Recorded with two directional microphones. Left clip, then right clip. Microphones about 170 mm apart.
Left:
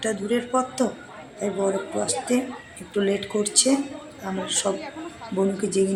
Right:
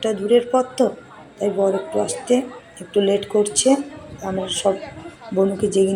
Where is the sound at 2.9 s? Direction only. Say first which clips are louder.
Right 6 dB; centre (ahead or behind).